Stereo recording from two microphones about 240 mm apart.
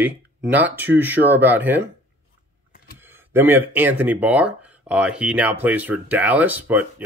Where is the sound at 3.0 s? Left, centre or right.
Centre.